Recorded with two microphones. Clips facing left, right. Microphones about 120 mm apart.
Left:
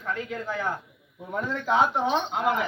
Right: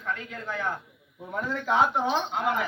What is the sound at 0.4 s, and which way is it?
Speech, 10° left (ahead or behind).